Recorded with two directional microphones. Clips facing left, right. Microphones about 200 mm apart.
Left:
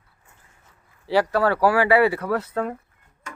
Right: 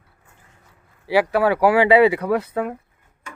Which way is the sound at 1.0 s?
15° right (ahead or behind).